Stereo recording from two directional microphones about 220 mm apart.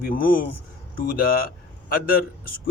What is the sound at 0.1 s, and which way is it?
Speech, 40° left (ahead or behind).